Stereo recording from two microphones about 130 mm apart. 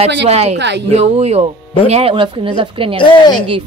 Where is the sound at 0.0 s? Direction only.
55° right (ahead or behind).